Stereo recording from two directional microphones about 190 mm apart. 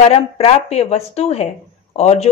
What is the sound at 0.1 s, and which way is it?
A woman's voice, 30° left (ahead or behind).